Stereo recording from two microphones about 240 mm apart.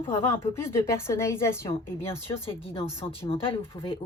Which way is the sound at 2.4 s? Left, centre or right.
Left.